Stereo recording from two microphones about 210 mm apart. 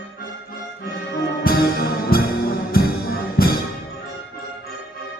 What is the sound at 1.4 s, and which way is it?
Music, 45° left (ahead or behind).